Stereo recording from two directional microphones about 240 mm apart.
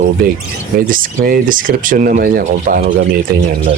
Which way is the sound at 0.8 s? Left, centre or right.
Right.